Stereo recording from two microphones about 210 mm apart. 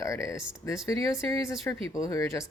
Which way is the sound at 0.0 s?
15° left (ahead or behind).